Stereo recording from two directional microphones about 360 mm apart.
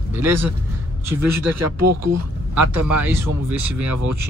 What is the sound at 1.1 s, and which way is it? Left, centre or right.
Speech, right.